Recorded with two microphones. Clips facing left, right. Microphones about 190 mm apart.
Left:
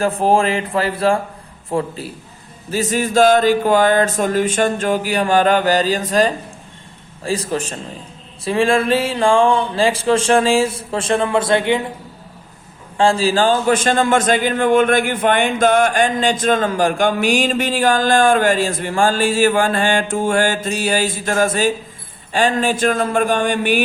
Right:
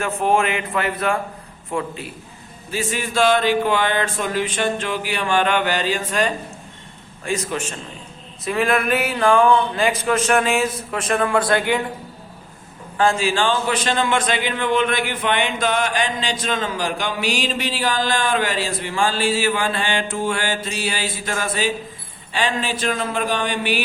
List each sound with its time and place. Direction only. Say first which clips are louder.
0.0 s speech: left 4 dB; 35° left (ahead or behind)
13.0 s a man's voice: left 4 dB; 30° left (ahead or behind); by 23.8 s 50° left (ahead or behind)